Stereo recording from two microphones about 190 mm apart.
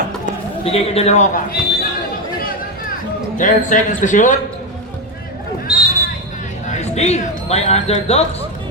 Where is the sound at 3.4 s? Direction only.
40° left (ahead or behind).